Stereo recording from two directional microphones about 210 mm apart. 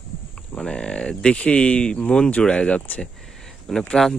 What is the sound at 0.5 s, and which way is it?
Speech, 5° left (ahead or behind).